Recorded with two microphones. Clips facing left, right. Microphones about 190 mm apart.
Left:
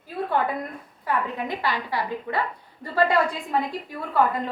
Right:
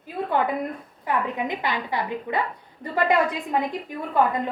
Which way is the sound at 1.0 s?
20° right (ahead or behind).